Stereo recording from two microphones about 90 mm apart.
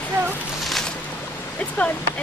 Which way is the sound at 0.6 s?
Centre (ahead or behind).